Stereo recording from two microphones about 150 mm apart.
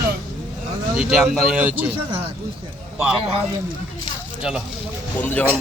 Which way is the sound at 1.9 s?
40° right (ahead or behind).